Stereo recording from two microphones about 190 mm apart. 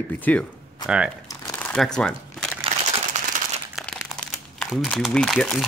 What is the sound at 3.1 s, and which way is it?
Crumpling, 40° right (ahead or behind).